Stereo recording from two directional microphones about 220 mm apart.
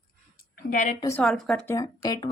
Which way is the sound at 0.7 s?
35° left (ahead or behind).